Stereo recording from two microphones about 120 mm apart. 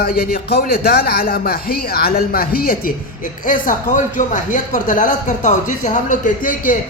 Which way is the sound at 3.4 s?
90° left.